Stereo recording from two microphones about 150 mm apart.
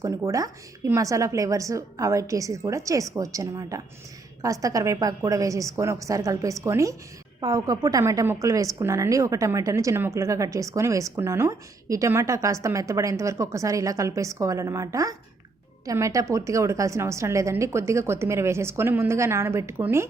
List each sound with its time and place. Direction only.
0.0 s a woman's voice: 20° right (ahead or behind)